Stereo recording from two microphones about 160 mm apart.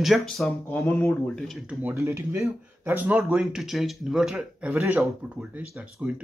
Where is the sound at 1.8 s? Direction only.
15° right (ahead or behind).